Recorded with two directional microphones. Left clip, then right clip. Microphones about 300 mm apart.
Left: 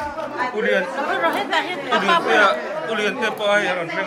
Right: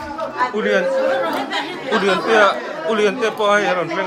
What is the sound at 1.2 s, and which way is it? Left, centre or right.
Speech, centre.